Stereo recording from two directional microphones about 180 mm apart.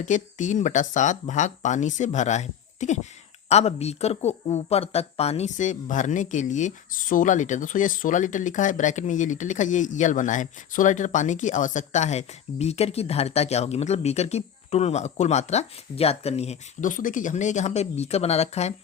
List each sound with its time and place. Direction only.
0.0 s speech: 45° left (ahead or behind)